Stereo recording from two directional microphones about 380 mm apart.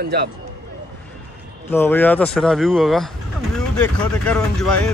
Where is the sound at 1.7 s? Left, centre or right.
Centre.